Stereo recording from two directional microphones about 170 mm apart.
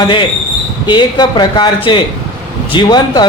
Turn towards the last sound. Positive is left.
turn(degrees=25)  # may be behind; listen again after turning